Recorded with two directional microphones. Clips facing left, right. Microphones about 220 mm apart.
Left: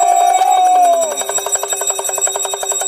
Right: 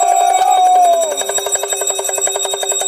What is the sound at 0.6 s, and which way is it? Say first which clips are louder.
Music: right 1 dB; 10° right (ahead or behind).